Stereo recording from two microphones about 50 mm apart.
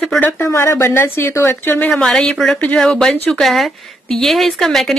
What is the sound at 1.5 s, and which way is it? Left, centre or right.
Speech, left.